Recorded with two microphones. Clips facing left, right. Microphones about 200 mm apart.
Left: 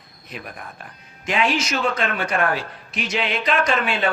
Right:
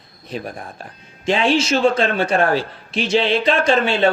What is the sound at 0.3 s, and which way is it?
A man's voice, 30° right (ahead or behind).